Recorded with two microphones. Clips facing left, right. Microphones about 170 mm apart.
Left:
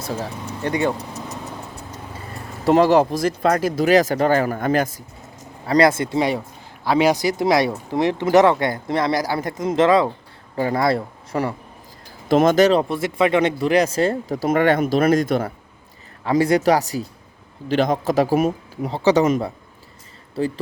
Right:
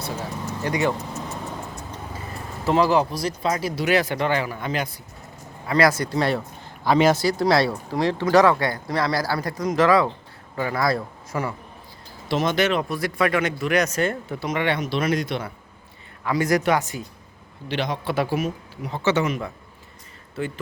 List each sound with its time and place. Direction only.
0.4 s speech: 30° left (ahead or behind)
2.6 s speech: 40° left (ahead or behind)
3.8 s speech: 40° left (ahead or behind)
5.6 s speech: 30° left (ahead or behind)
6.1 s speech: 15° left (ahead or behind); by 11.5 s 35° left (ahead or behind)
12.3 s speech: 45° left (ahead or behind)
16.3 s speech: 30° left (ahead or behind); by 18.9 s 50° left (ahead or behind)
18.9 s speech: 35° left (ahead or behind)